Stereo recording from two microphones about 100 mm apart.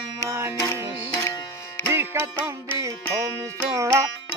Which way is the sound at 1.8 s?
25° right (ahead or behind).